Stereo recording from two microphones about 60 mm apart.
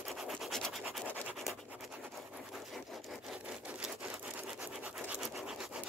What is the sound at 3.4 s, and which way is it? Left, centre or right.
Wood, centre.